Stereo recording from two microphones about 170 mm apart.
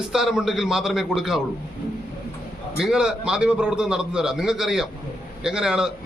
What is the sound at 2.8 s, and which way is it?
A man's voice, 5° right (ahead or behind).